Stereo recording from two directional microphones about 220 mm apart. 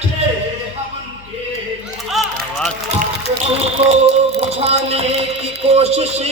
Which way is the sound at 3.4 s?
30° right (ahead or behind).